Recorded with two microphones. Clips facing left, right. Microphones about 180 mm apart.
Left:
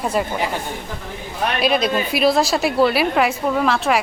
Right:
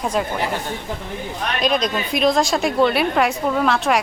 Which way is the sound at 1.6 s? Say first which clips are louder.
Left 1 dB; 5° left (ahead or behind).